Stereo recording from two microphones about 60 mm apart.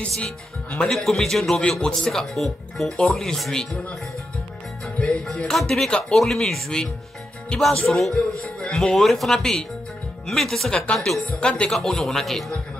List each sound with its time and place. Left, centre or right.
0.2 s speech: centre
0.9 s speech: centre
2.0 s speech: centre
4.9 s speech: centre
7.9 s speech: centre
11.2 s speech: centre
11.8 s speech: centre